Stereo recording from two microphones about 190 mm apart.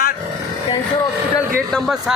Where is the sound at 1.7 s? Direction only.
Centre (ahead or behind).